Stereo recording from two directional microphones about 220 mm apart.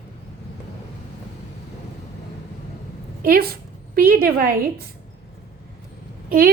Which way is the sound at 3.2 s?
45° right (ahead or behind).